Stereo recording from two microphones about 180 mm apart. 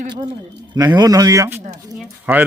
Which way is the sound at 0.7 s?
25° right (ahead or behind).